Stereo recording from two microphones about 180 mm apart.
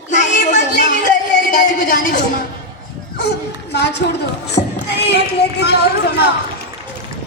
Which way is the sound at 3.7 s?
70° left (ahead or behind).